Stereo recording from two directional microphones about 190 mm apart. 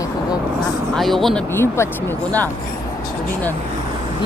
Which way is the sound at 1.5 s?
15° left (ahead or behind).